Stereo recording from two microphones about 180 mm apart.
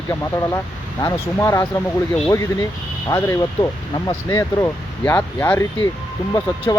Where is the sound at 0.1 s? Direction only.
15° left (ahead or behind).